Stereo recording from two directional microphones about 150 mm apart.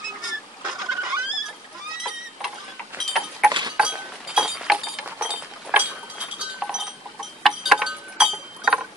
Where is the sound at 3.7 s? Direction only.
5° right (ahead or behind).